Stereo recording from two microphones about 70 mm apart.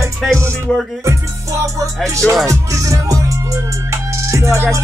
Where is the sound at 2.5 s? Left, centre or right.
Right.